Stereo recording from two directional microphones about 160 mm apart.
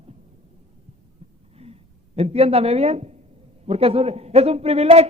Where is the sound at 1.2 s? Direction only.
45° right (ahead or behind).